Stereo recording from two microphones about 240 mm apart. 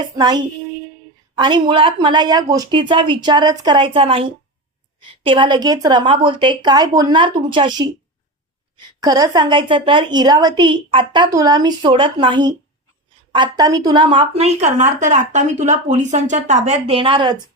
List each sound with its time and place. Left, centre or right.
0.0 s a woman's voice: centre
1.4 s speech: centre
5.2 s a woman's voice: right